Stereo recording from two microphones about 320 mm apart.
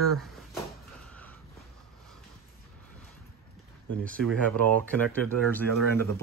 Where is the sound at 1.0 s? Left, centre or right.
Centre.